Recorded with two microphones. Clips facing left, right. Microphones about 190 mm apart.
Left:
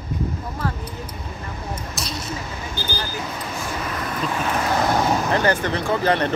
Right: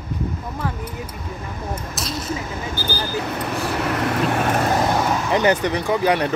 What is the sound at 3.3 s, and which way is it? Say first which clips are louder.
Vehicle: right 5 dB; 65° right (ahead or behind).